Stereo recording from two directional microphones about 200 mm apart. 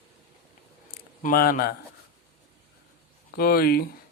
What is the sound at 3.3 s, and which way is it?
Speech, 50° left (ahead or behind).